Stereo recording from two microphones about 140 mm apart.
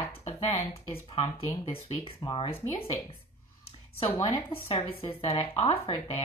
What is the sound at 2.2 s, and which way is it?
Speech, 35° left (ahead or behind).